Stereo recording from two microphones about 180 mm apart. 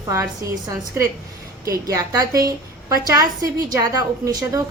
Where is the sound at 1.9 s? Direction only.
20° right (ahead or behind).